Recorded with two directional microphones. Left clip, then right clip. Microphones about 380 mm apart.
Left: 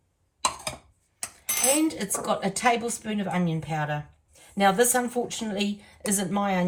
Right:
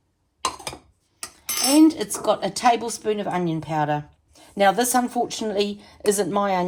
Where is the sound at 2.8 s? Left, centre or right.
Centre.